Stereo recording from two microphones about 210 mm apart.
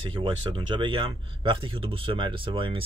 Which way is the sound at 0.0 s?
25° right (ahead or behind).